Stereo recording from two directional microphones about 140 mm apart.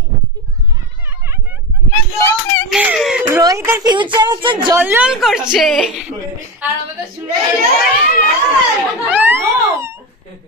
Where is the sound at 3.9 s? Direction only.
35° right (ahead or behind).